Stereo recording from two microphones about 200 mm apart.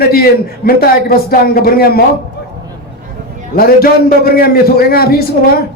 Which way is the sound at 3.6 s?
50° left (ahead or behind).